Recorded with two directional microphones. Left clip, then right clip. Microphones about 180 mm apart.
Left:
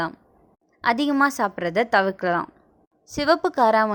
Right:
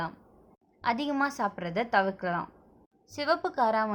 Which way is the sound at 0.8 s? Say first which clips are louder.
Left 8 dB; 40° left (ahead or behind).